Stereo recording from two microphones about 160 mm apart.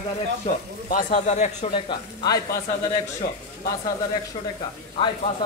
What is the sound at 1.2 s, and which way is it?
Speech, 45° left (ahead or behind).